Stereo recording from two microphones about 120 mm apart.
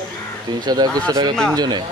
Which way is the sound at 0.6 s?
35° right (ahead or behind).